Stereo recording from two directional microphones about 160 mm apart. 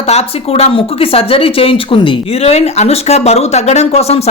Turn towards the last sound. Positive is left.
turn(degrees=40)  # may be behind; listen again after turning